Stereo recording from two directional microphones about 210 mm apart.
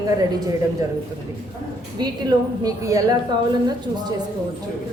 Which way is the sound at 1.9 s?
20° right (ahead or behind).